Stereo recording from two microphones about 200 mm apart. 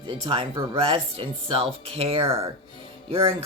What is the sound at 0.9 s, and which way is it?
Speech, 30° right (ahead or behind).